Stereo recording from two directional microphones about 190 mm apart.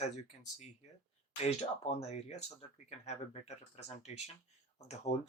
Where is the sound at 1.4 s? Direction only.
35° left (ahead or behind).